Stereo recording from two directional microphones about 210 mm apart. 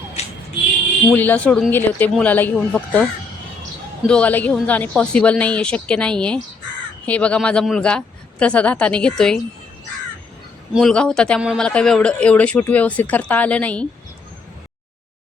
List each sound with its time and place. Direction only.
0.2 s a sound: 30° left (ahead or behind)
1.1 s speech: 10° left (ahead or behind)
10.8 s speech: 5° left (ahead or behind)